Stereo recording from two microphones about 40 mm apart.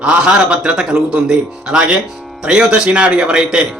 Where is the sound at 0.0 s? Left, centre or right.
Right.